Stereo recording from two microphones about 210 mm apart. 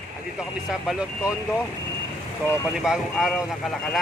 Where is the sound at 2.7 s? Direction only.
Centre (ahead or behind).